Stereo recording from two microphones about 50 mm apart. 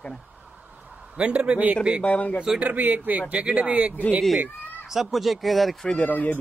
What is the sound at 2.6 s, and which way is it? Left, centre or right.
A man's voice, right.